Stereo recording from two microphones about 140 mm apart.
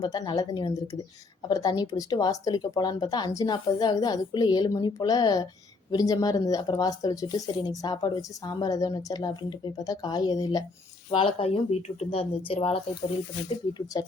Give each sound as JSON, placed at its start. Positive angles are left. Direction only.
{"t": 0.0, "sound": "speech", "side_deg": 30}
{"t": 11.1, "sound": "speech", "side_deg": 40}
{"t": 13.9, "sound": "speech", "side_deg": 30}